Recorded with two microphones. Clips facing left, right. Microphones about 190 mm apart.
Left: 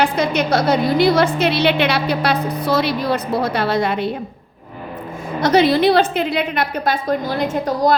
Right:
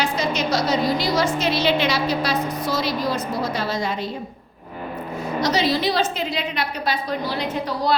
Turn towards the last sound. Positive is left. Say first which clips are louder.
# left 5 dB
turn(degrees=45)  # may be behind; listen again after turning